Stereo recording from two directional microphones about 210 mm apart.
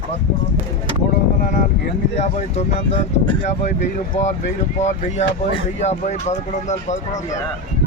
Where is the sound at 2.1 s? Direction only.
30° left (ahead or behind).